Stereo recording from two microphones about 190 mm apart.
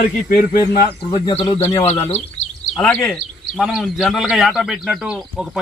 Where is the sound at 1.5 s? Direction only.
10° left (ahead or behind).